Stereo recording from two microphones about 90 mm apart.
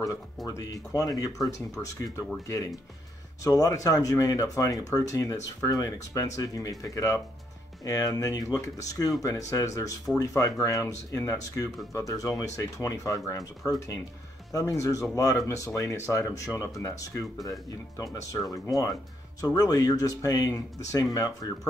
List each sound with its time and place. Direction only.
0.5 s speech: 40° left (ahead or behind)